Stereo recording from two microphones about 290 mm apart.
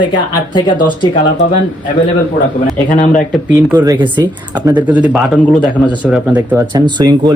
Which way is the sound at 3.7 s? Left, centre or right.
Centre.